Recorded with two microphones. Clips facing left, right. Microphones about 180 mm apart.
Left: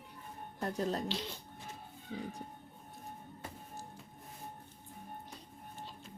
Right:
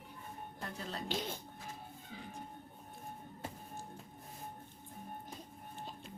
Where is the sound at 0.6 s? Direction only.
45° left (ahead or behind).